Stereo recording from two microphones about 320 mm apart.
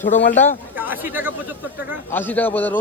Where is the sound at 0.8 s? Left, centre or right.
Centre.